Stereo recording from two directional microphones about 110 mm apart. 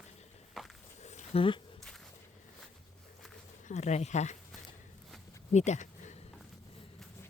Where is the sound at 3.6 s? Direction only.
90° left.